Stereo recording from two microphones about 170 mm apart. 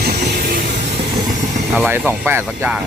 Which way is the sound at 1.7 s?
10° right (ahead or behind).